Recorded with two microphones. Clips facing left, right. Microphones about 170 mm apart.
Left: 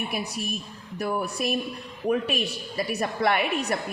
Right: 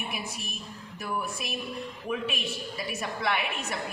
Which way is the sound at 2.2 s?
Centre (ahead or behind).